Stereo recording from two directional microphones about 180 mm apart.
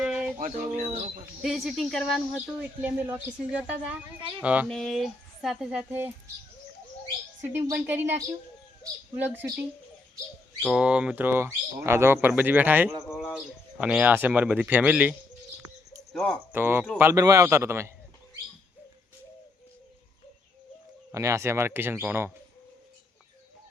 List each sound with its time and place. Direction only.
0.0 s a sound: 5° right (ahead or behind)
0.3 s speech: 45° right (ahead or behind)
1.4 s speech: centre (ahead or behind)
7.4 s speech: 10° right (ahead or behind)
13.1 s speech: 10° left (ahead or behind)
13.7 s speech: 5° right (ahead or behind)
16.1 s speech: 5° left (ahead or behind)
16.5 s speech: 10° right (ahead or behind)
21.1 s speech: 15° right (ahead or behind)